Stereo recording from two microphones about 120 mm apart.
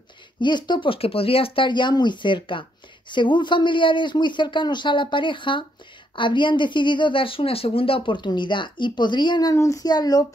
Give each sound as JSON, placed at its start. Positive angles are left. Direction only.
{"t": 0.4, "sound": "speech", "side_deg": 40}